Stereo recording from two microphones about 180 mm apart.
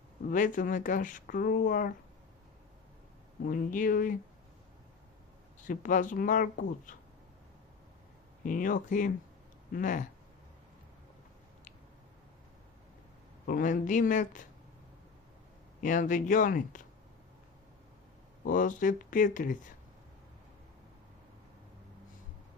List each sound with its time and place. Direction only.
0.3 s speech: 45° left (ahead or behind)
3.4 s speech: 50° left (ahead or behind)
5.6 s speech: 45° left (ahead or behind)
8.4 s speech: 50° left (ahead or behind)
13.5 s speech: 50° left (ahead or behind)
15.8 s speech: 45° left (ahead or behind)
18.4 s speech: 45° left (ahead or behind)